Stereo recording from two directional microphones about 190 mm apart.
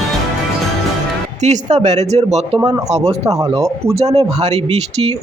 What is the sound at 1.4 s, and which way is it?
Speech, 35° right (ahead or behind).